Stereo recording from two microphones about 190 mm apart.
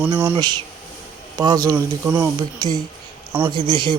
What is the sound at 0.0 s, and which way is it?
Speech, 10° right (ahead or behind).